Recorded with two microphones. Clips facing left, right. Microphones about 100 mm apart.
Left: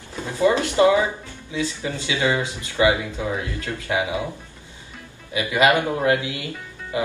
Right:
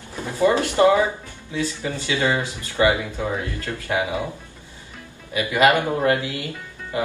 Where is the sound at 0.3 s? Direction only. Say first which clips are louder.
Even; 20° left (ahead or behind).